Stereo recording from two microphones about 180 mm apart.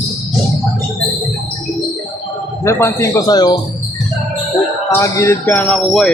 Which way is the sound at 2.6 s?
15° left (ahead or behind).